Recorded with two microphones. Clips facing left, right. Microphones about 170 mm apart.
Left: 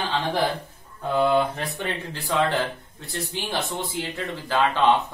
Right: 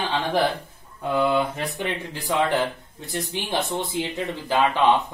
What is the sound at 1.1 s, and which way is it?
Speech, 10° right (ahead or behind).